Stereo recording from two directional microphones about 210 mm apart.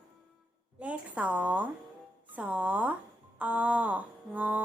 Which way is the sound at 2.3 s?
5° right (ahead or behind).